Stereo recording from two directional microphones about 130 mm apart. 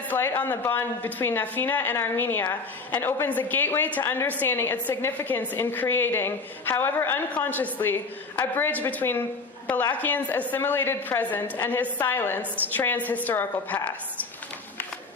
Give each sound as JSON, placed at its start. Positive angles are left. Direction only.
{"t": 0.1, "sound": "a woman's voice", "side_deg": 15}